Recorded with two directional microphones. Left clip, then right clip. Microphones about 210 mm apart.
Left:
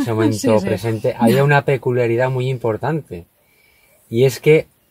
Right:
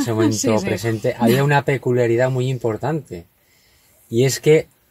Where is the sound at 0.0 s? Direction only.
15° left (ahead or behind).